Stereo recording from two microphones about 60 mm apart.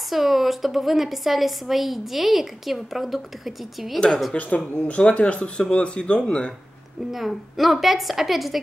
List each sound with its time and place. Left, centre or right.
0.1 s a woman's voice: centre
4.3 s speech: left
7.1 s a woman's voice: centre